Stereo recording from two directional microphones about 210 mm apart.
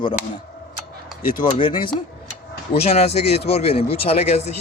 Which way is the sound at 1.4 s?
25° left (ahead or behind).